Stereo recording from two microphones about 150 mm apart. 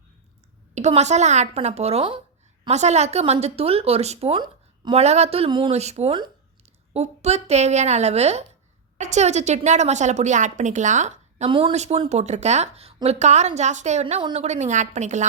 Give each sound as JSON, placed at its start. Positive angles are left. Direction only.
{"t": 0.7, "sound": "speech", "side_deg": -45}
{"t": 2.6, "sound": "a woman's voice", "side_deg": -50}
{"t": 6.9, "sound": "speech", "side_deg": -45}